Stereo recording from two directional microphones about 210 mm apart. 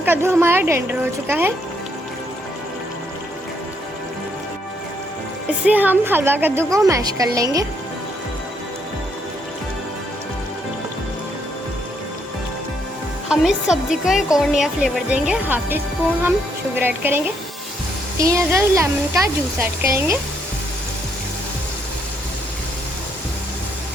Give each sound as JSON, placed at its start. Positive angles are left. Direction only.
{"t": 0.0, "sound": "speech", "side_deg": -10}
{"t": 5.6, "sound": "speech", "side_deg": -10}
{"t": 13.2, "sound": "speech", "side_deg": -5}